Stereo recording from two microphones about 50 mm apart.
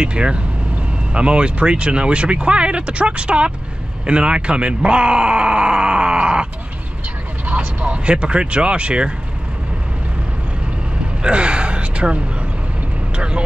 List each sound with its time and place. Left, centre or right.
0.0 s speech: centre
7.4 s speech: right
11.2 s gasp: right